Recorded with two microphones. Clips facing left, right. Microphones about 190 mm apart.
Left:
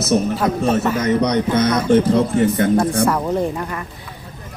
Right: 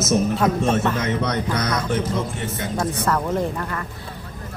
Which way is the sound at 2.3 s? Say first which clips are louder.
Left 11 dB; 55° left (ahead or behind).